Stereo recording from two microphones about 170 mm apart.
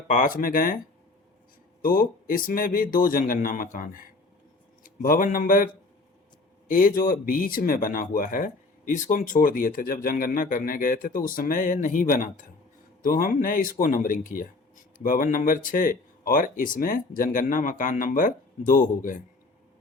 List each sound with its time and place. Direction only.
0.1 s speech: 55° left (ahead or behind)
1.8 s speech: 55° left (ahead or behind)